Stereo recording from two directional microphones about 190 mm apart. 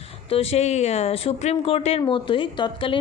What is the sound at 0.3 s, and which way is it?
Speech, 30° left (ahead or behind).